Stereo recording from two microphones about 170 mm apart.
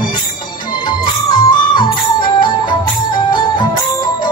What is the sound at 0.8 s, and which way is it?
Music, 25° left (ahead or behind).